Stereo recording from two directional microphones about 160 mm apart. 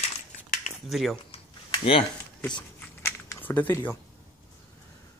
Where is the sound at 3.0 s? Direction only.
15° left (ahead or behind).